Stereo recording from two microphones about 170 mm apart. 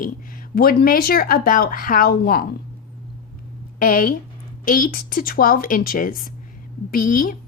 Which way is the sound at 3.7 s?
55° left (ahead or behind).